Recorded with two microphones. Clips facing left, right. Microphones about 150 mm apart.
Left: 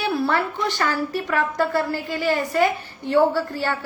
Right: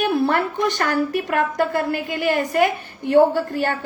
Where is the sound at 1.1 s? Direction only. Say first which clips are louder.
Right 2 dB; 20° right (ahead or behind).